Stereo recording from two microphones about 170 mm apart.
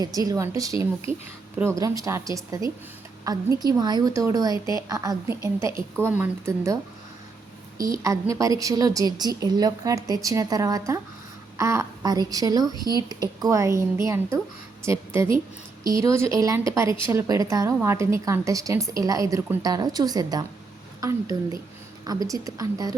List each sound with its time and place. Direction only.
0.0 s a woman's voice: 20° right (ahead or behind)
7.8 s a woman's voice: 20° right (ahead or behind)